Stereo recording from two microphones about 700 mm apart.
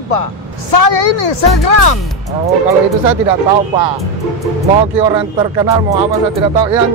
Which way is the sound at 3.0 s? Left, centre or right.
Right.